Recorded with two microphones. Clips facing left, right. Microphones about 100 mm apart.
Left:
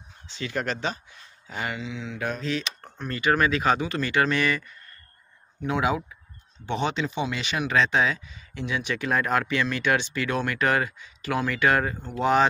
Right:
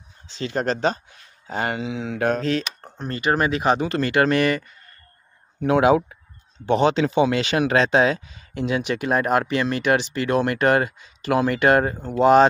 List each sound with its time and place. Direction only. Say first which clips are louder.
0.4 s speech: right 6 dB; 30° right (ahead or behind); by 2.6 s 50° right (ahead or behind)
2.8 s speech: right 2 dB; 30° right (ahead or behind)
3.8 s speech: right 5 dB; 45° right (ahead or behind)
5.6 s speech: right 9 dB; 65° right (ahead or behind)
7.0 s speech: right 9 dB; 90° right
7.7 s speech: right 4 dB; 55° right (ahead or behind)
9.0 s speech: right 4 dB; 30° right (ahead or behind)
12.2 s speech: right 7 dB; 30° right (ahead or behind)